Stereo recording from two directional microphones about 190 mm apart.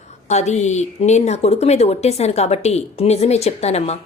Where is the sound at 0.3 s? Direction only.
35° left (ahead or behind).